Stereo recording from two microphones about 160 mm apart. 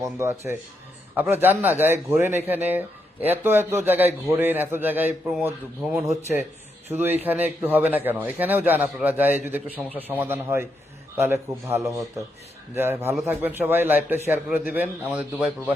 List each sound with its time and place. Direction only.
0.0 s speech: 15° right (ahead or behind)